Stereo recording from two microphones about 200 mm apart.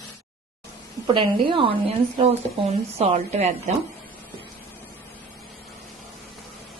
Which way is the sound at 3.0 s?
35° right (ahead or behind).